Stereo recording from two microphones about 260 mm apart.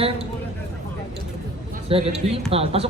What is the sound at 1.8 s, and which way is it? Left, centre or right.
A man's voice, right.